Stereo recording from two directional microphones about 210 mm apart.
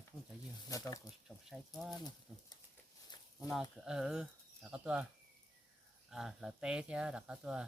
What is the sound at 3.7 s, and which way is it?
Speech, 5° right (ahead or behind).